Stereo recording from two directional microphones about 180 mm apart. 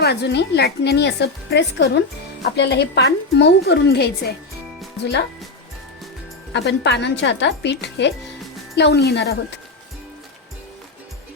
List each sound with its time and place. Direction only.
0.0 s a woman's voice: 70° left (ahead or behind); by 2.0 s 85° left
2.4 s a woman's voice: 70° left (ahead or behind)
6.5 s a woman's voice: 75° left (ahead or behind)